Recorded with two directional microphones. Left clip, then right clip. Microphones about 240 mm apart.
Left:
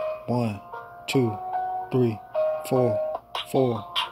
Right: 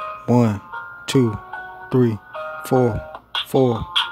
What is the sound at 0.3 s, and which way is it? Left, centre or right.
Speech, centre.